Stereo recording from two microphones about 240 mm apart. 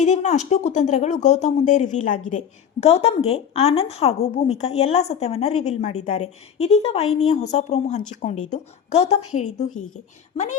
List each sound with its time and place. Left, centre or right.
0.0 s a woman's voice: left